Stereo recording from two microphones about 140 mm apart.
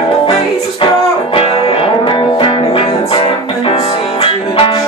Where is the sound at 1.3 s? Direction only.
45° left (ahead or behind).